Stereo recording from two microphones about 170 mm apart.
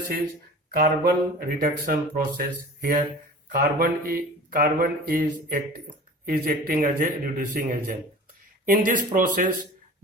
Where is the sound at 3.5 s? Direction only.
60° right (ahead or behind).